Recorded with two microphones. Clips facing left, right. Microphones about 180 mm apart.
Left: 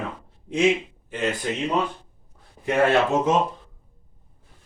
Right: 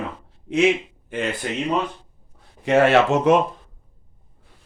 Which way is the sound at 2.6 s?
75° right (ahead or behind).